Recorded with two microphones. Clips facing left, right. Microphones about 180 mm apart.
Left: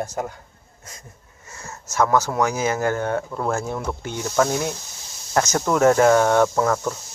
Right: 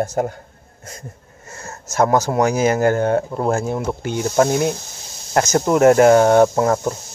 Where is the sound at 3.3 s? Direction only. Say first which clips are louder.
Right 5 dB; 20° right (ahead or behind).